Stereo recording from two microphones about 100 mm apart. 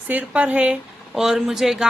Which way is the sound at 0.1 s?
15° right (ahead or behind).